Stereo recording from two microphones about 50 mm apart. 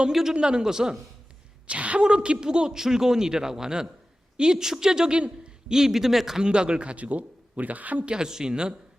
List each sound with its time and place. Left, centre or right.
0.1 s speech: centre
1.6 s speech: right
8.1 s speech: centre